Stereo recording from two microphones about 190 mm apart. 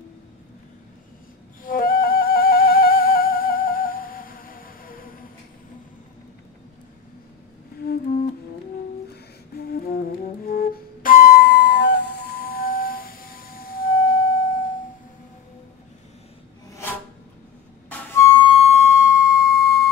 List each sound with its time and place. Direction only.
1.6 s music: 50° left (ahead or behind)
7.8 s music: 55° left (ahead or behind)
10.4 s flute: 50° left (ahead or behind)
18.1 s music: 20° left (ahead or behind); by 19.8 s 50° left (ahead or behind)